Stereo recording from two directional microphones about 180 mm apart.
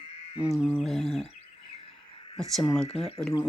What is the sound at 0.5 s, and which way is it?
Mantra, centre (ahead or behind).